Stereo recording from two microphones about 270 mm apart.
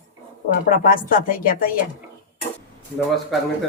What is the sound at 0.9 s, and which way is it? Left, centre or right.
Speech, left.